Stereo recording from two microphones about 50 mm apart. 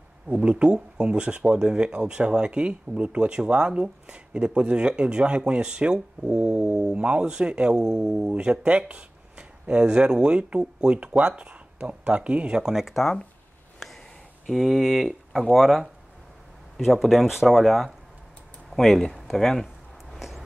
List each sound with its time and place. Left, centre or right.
0.3 s speech: right
6.2 s a sound: centre
6.9 s speech: right
12.8 s speech: centre
14.4 s speech: centre
18.7 s a sound: centre
20.2 s vehicle: centre